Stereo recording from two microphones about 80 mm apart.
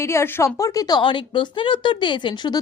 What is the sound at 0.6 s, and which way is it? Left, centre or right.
Speech, left.